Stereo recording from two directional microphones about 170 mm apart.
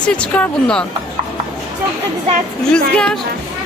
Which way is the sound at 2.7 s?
5° left (ahead or behind).